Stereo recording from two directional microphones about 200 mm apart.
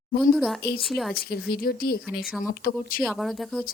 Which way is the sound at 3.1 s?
Centre (ahead or behind).